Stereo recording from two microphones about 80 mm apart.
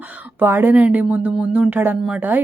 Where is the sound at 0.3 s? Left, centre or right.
Right.